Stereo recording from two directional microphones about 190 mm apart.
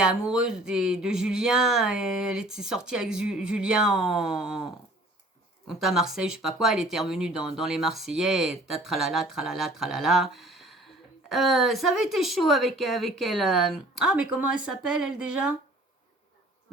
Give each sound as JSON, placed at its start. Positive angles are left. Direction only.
{"t": 0.0, "sound": "speech", "side_deg": -5}